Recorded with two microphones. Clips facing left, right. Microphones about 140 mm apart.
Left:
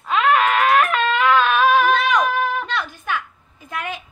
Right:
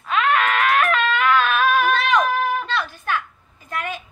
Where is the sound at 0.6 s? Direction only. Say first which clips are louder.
Left 2 dB; 25° left (ahead or behind).